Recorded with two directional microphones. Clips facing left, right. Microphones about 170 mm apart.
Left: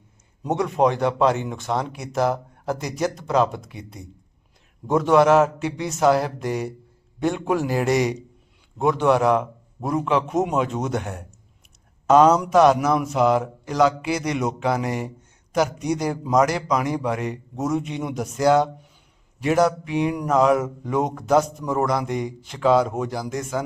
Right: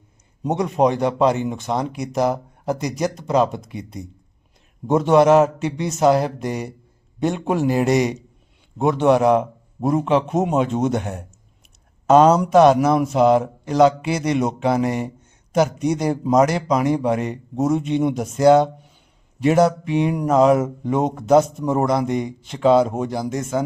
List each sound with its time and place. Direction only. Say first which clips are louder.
0.4 s speech: right 2 dB; 20° right (ahead or behind)